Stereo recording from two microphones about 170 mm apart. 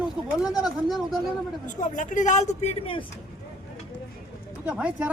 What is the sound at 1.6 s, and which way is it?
Speech, 45° left (ahead or behind).